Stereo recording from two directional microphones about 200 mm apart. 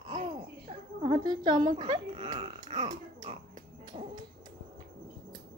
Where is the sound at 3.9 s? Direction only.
35° right (ahead or behind).